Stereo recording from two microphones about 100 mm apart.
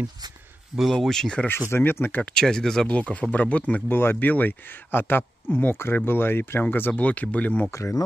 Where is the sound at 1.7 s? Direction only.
25° left (ahead or behind).